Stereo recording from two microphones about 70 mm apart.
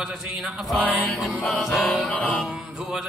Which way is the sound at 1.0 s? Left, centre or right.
Left.